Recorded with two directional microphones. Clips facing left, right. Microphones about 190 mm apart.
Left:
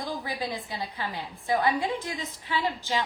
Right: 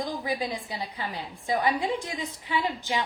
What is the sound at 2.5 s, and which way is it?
Speech, 15° right (ahead or behind).